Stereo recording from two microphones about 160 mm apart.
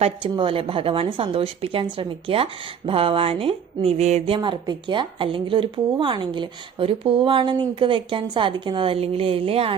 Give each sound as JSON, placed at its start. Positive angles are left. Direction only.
{"t": 0.0, "sound": "a woman's voice", "side_deg": -35}
{"t": 4.4, "sound": "a woman's voice", "side_deg": -25}